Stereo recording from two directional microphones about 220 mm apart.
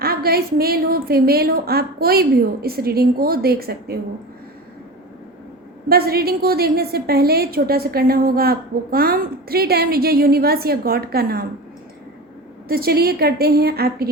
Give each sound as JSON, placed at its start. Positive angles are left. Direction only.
{"t": 0.0, "sound": "a woman's voice", "side_deg": -45}
{"t": 5.9, "sound": "a woman's voice", "side_deg": -45}
{"t": 12.6, "sound": "a woman's voice", "side_deg": -45}